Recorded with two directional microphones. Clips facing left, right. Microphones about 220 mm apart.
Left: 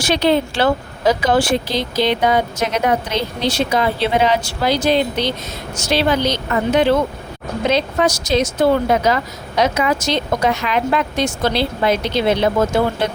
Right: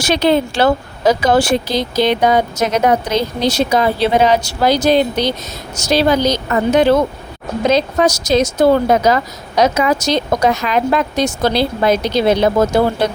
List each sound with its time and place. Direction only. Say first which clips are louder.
0.0 s speech: right 2 dB; 45° right (ahead or behind)